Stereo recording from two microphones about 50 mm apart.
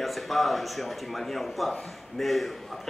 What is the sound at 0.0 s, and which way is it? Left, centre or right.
A man's voice, centre.